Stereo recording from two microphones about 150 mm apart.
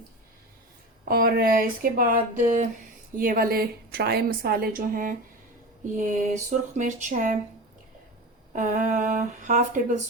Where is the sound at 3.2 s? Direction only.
70° right (ahead or behind).